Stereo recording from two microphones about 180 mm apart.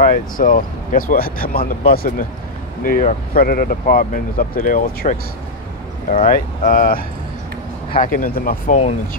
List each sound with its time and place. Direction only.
0.0 s speech: 50° left (ahead or behind)
8.0 s speech: 50° left (ahead or behind)